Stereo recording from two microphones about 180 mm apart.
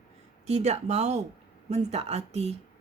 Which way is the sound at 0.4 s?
40° right (ahead or behind).